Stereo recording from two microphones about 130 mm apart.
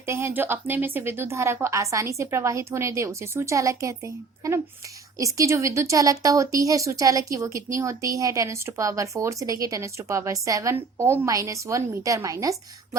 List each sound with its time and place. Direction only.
0.0 s speech: 20° right (ahead or behind)